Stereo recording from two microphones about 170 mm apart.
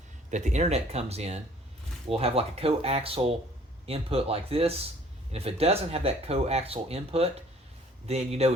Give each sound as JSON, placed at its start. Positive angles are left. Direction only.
{"t": 0.3, "sound": "speech", "side_deg": -45}